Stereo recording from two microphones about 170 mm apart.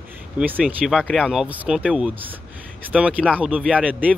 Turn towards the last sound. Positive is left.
turn(degrees=-10)  # may be behind; listen again after turning